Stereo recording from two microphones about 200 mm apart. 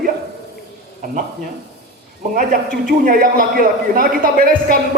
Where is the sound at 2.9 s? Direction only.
45° right (ahead or behind).